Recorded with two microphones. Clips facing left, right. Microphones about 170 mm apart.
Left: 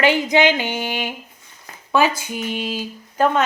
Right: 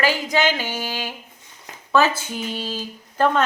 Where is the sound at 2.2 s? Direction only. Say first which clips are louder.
Left 3 dB; 10° left (ahead or behind).